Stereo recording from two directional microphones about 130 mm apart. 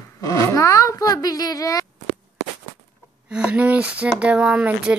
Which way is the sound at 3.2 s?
10° right (ahead or behind).